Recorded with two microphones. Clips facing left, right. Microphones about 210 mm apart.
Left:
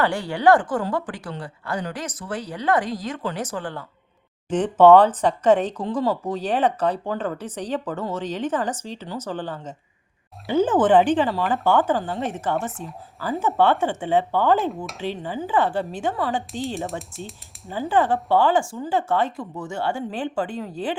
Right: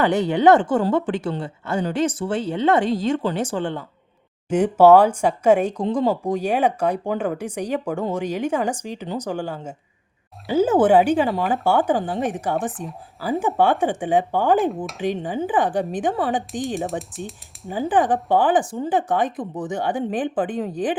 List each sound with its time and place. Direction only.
0.0 s speech: 20° right (ahead or behind)
4.4 s speech: 10° right (ahead or behind)
17.1 s speech: centre (ahead or behind)
17.7 s speech: 15° right (ahead or behind)